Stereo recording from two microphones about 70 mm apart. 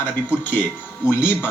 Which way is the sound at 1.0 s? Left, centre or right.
Left.